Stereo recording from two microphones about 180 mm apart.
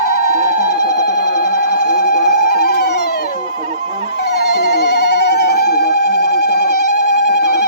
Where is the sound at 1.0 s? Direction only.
65° left (ahead or behind).